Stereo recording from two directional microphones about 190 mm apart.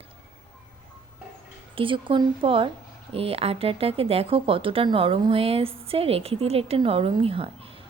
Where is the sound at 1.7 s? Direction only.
25° right (ahead or behind).